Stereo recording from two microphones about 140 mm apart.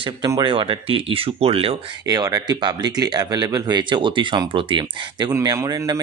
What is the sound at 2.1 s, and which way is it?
Speech, 25° right (ahead or behind).